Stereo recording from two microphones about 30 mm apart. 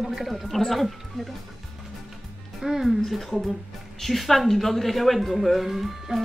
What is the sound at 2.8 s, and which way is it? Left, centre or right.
Speech, centre.